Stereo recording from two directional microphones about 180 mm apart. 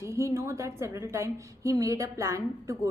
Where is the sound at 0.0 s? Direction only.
15° right (ahead or behind).